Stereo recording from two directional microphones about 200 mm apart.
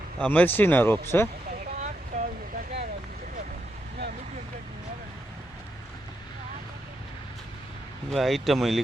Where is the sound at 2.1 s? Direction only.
35° right (ahead or behind).